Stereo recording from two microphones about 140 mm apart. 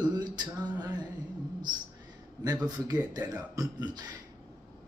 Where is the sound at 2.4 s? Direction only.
25° right (ahead or behind).